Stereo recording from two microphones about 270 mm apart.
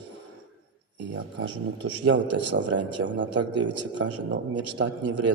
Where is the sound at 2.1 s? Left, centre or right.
Right.